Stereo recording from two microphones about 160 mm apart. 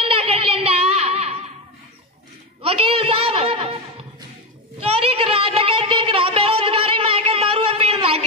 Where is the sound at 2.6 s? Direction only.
35° right (ahead or behind).